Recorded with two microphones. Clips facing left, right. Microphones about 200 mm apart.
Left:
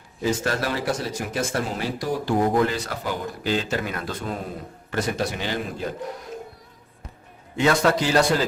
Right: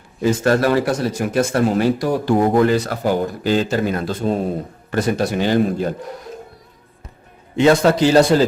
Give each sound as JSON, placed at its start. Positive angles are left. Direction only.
{"t": 0.2, "sound": "speech", "side_deg": -55}
{"t": 4.9, "sound": "speech", "side_deg": -45}
{"t": 7.5, "sound": "a man's voice", "side_deg": -25}